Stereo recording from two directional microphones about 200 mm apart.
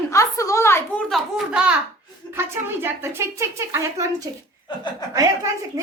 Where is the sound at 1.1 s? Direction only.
5° right (ahead or behind).